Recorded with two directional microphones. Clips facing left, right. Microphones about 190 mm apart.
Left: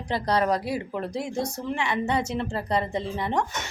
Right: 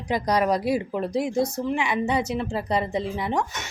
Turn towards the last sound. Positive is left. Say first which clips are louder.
# right 1 dB
turn(degrees=-10)  # may be behind; listen again after turning